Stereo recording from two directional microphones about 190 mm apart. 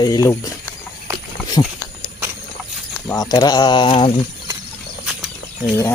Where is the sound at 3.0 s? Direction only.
20° left (ahead or behind).